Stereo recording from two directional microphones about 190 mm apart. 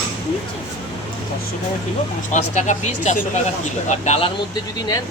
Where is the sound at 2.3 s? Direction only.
40° left (ahead or behind).